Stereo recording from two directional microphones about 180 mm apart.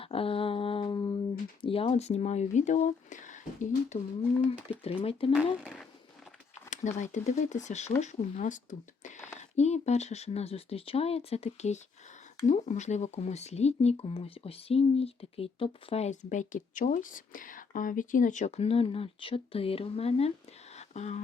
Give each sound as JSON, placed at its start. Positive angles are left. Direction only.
{"t": 0.0, "sound": "a sound", "side_deg": 30}
{"t": 1.6, "sound": "speech", "side_deg": 30}
{"t": 4.8, "sound": "speech", "side_deg": 35}
{"t": 5.3, "sound": "speech", "side_deg": 0}
{"t": 6.7, "sound": "speech", "side_deg": 40}
{"t": 9.0, "sound": "a sound", "side_deg": 40}
{"t": 9.6, "sound": "speech", "side_deg": 40}
{"t": 20.7, "sound": "whispering", "side_deg": 40}